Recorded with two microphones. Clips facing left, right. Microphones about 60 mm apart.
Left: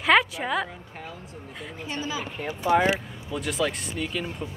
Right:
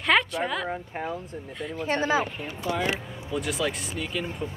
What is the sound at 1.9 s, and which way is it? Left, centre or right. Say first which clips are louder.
Speech: right 8 dB; right.